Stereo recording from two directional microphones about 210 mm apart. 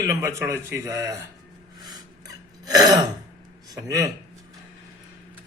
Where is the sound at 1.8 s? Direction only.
20° right (ahead or behind).